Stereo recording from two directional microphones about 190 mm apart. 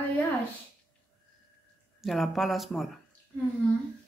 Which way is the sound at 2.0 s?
Centre (ahead or behind).